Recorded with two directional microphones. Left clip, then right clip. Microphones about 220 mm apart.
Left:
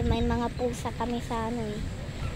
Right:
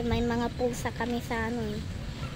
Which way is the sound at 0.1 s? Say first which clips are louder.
Even; 5° right (ahead or behind).